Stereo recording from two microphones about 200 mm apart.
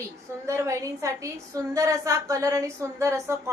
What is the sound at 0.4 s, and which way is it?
A woman's voice, 15° right (ahead or behind).